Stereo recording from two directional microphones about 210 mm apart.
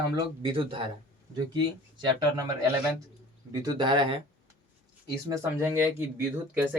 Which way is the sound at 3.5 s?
20° right (ahead or behind).